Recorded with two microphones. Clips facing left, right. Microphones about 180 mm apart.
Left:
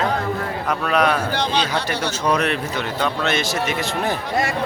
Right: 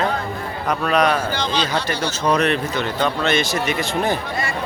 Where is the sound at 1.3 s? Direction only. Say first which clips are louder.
Left 1 dB; 60° left (ahead or behind).